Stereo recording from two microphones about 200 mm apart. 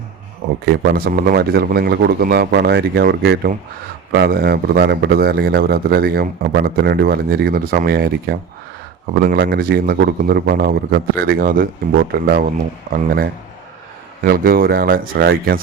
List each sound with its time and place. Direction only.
0.6 s speech: 50° right (ahead or behind)